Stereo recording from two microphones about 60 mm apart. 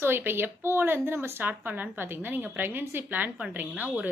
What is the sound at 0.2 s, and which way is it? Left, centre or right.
A woman's voice, right.